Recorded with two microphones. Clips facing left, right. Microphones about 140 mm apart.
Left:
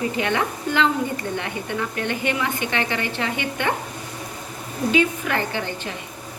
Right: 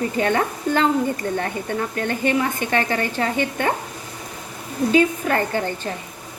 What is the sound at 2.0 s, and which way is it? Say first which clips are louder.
A woman's voice: right 5 dB; 40° right (ahead or behind).